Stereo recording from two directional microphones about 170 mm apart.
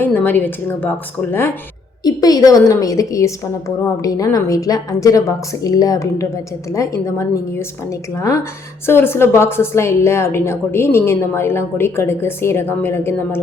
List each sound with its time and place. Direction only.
0.0 s a woman's voice: 10° left (ahead or behind)